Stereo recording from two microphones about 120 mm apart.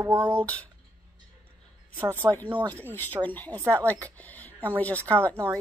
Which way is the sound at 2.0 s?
25° right (ahead or behind).